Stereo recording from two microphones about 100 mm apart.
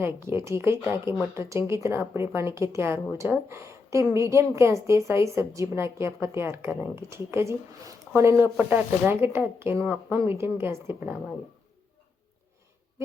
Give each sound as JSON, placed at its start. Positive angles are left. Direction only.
{"t": 0.0, "sound": "a woman's voice", "side_deg": -25}